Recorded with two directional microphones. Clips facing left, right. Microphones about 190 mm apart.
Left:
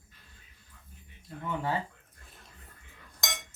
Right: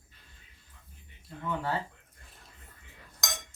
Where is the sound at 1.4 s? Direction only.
15° left (ahead or behind).